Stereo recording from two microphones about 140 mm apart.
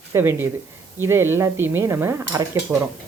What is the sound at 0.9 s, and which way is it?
A woman's voice, 15° right (ahead or behind).